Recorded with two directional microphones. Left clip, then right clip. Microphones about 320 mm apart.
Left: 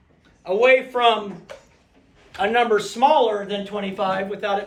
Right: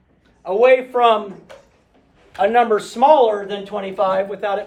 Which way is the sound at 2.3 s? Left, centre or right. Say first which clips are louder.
Right 4 dB; centre.